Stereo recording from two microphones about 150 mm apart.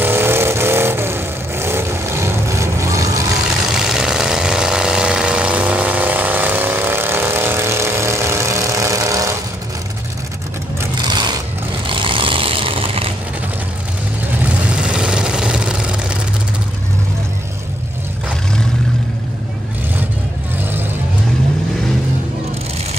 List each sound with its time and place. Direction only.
0.0 s vehicle: 15° right (ahead or behind)
3.7 s vehicle: 5° right (ahead or behind); by 9.4 s 20° right (ahead or behind)
11.0 s a sound: 30° right (ahead or behind)
11.9 s vehicle: 35° right (ahead or behind)
14.4 s vehicle: 5° right (ahead or behind)